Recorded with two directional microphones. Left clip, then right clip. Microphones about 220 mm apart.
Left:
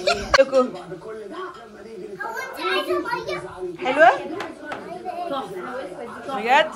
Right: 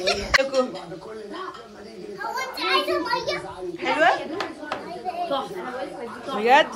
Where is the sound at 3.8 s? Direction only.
10° right (ahead or behind).